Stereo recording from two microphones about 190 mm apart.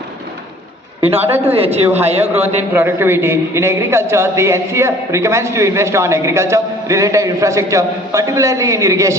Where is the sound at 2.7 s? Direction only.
10° right (ahead or behind).